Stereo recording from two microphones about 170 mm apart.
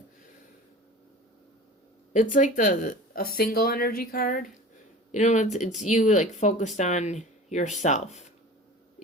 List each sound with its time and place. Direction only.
2.3 s speech: 50° left (ahead or behind)